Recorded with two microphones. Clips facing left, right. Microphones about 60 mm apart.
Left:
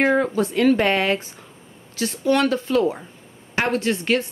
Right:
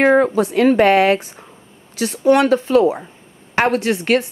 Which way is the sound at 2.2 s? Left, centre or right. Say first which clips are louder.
Right 6 dB; right.